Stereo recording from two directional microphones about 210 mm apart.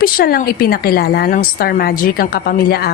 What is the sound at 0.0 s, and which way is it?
A woman's voice, 45° left (ahead or behind).